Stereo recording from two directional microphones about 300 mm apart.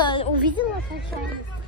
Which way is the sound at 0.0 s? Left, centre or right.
Centre.